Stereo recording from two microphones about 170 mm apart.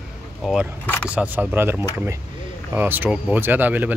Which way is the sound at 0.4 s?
Centre (ahead or behind).